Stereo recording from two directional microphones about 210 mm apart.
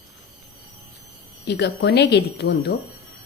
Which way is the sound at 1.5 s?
55° left (ahead or behind).